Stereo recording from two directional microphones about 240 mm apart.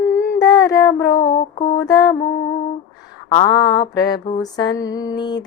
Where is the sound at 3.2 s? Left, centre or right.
Centre.